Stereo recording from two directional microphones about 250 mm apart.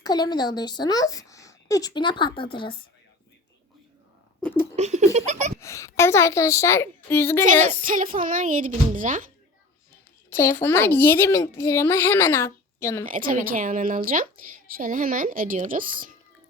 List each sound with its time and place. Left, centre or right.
0.0 s speech: centre
4.4 s laughter: centre
4.8 s laughter: right
5.5 s a child's voice: centre
7.7 s speech: right
10.3 s speech: centre
13.1 s speech: right